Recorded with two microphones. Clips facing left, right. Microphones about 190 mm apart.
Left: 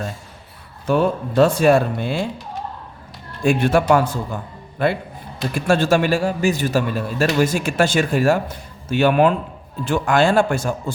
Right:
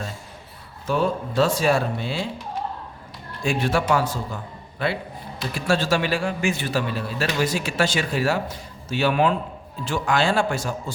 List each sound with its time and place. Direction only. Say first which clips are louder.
0.9 s speech: left 5 dB; 60° left (ahead or behind)
3.4 s a man's voice: left 6 dB; 55° left (ahead or behind)